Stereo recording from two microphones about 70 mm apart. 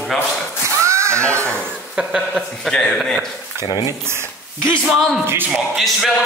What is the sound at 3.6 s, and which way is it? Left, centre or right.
Speech, left.